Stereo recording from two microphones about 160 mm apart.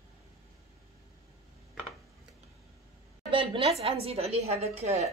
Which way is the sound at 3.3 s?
30° right (ahead or behind).